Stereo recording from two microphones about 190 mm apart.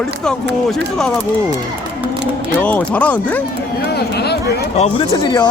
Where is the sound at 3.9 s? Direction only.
60° left (ahead or behind).